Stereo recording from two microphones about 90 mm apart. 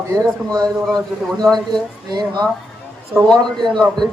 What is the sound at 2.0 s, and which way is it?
Speech, 50° right (ahead or behind).